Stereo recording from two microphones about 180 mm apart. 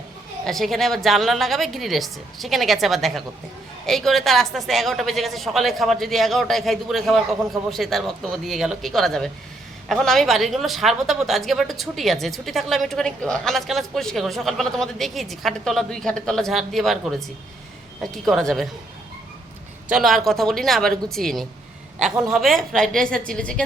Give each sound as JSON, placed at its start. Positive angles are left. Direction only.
{"t": 0.4, "sound": "speech", "side_deg": 0}
{"t": 19.9, "sound": "speech", "side_deg": 0}